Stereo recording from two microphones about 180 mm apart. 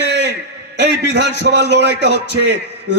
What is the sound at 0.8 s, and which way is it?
A man's voice, 70° right (ahead or behind).